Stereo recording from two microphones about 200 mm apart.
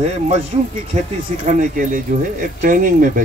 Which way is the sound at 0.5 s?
30° right (ahead or behind).